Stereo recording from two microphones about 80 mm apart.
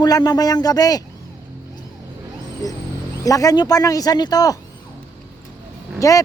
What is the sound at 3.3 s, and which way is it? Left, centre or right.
Speech, left.